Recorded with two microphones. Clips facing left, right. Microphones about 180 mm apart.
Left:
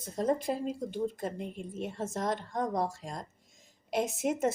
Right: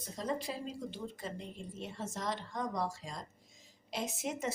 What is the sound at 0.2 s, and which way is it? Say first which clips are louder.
Speech: left 8 dB; 50° left (ahead or behind).